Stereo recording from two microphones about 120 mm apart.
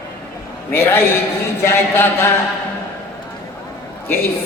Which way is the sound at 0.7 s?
20° left (ahead or behind).